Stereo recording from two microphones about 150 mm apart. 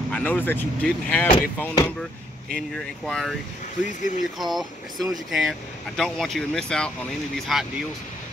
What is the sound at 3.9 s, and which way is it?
Speech, 55° left (ahead or behind).